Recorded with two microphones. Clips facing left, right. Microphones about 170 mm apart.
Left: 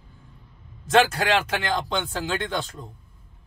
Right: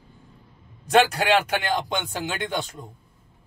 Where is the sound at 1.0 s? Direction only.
15° right (ahead or behind).